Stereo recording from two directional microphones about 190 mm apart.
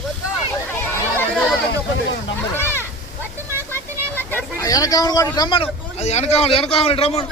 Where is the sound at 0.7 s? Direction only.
10° left (ahead or behind).